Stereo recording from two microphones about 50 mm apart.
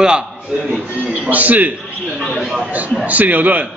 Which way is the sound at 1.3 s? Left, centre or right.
Right.